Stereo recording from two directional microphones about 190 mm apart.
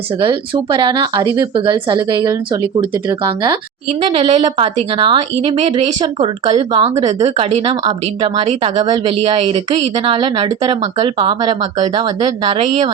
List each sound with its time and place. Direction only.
0.2 s speech: 25° right (ahead or behind)
8.8 s speech: 20° right (ahead or behind)